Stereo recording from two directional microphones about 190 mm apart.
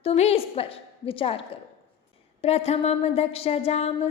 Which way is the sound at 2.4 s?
35° left (ahead or behind).